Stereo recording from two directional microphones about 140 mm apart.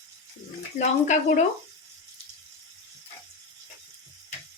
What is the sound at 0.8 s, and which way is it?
Speech, 60° left (ahead or behind).